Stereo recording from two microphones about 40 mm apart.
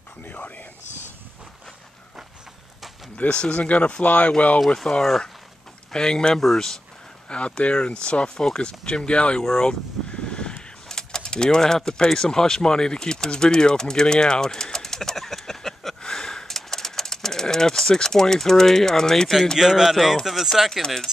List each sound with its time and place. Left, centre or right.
0.2 s speech: left
3.2 s speech: left
5.9 s speech: centre
7.2 s speech: left; by 16.0 s centre
16.0 s a sound: centre
19.6 s speech: centre